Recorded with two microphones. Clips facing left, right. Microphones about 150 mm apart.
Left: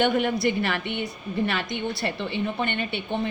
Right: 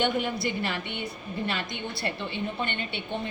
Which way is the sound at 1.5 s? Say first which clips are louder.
Left 5 dB; 85° left.